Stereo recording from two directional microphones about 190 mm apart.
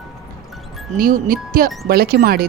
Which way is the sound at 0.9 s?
50° right (ahead or behind).